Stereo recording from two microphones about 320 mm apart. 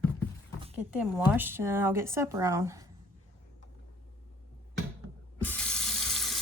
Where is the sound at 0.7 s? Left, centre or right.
Centre.